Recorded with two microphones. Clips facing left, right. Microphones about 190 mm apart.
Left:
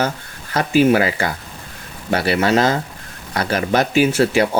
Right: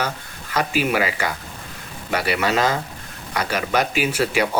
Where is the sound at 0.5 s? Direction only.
30° left (ahead or behind).